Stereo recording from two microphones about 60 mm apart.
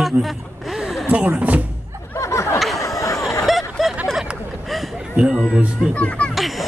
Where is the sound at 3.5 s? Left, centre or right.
Centre.